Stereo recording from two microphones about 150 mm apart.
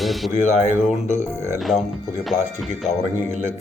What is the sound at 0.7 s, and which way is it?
Speech, 15° right (ahead or behind).